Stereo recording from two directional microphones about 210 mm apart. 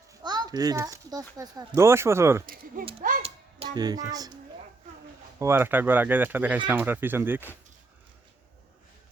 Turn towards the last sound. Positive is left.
turn(degrees=-10)  # may be behind; listen again after turning